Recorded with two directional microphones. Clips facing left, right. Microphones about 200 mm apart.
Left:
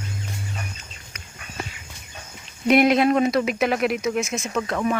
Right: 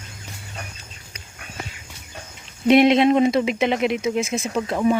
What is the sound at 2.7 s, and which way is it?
Speech, 25° right (ahead or behind).